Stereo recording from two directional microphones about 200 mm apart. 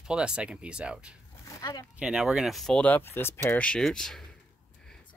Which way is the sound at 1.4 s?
15° left (ahead or behind).